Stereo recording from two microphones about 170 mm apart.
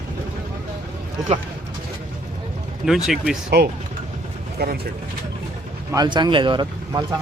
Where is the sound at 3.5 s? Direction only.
75° right (ahead or behind).